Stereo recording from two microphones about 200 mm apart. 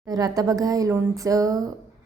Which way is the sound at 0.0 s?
15° right (ahead or behind).